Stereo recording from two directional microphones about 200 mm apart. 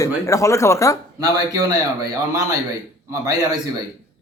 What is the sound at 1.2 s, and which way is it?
Speech, 20° right (ahead or behind).